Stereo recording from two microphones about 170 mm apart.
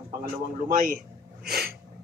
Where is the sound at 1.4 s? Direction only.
65° right (ahead or behind).